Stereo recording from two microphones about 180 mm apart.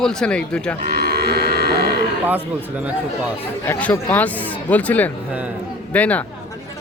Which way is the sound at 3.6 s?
10° left (ahead or behind).